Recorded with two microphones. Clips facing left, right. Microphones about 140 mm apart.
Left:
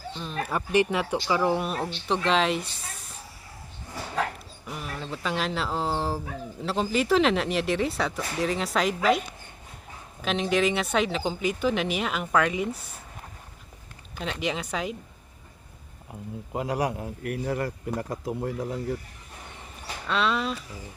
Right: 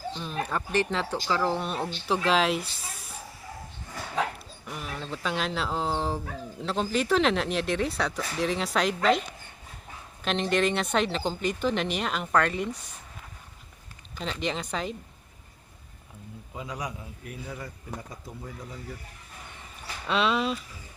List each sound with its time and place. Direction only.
0.1 s speech: centre (ahead or behind)
0.5 s speech: 10° left (ahead or behind)
4.1 s speech: centre (ahead or behind)
10.2 s speech: 5° left (ahead or behind)
14.2 s speech: 5° left (ahead or behind)
16.5 s a man's voice: 65° left (ahead or behind)
20.1 s speech: centre (ahead or behind)